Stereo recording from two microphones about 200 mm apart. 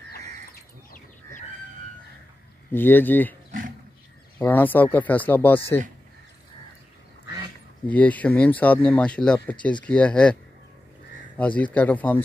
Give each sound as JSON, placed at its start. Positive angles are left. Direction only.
{"t": 0.5, "sound": "a sound", "side_deg": 45}
{"t": 2.7, "sound": "speech", "side_deg": 10}
{"t": 4.4, "sound": "speech", "side_deg": 10}
{"t": 7.9, "sound": "speech", "side_deg": 5}
{"t": 11.3, "sound": "speech", "side_deg": 5}